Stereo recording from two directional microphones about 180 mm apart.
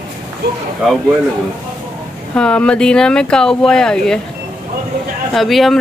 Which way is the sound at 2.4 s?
5° left (ahead or behind).